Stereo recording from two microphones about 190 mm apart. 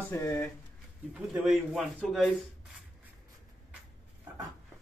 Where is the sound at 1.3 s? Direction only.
Centre (ahead or behind).